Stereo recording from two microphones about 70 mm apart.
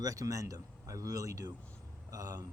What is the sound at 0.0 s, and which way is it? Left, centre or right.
Speech, right.